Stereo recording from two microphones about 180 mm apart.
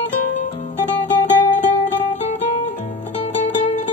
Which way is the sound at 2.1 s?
40° left (ahead or behind).